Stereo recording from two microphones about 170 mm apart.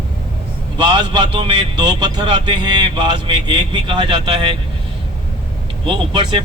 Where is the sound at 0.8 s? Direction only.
25° right (ahead or behind).